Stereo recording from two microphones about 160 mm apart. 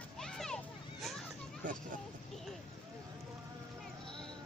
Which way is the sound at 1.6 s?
55° right (ahead or behind).